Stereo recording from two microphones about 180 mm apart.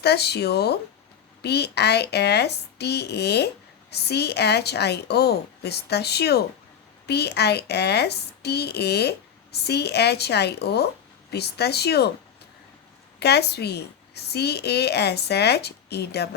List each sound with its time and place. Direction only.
0.0 s a woman's voice: 65° left (ahead or behind)
13.1 s a woman's voice: 65° left (ahead or behind)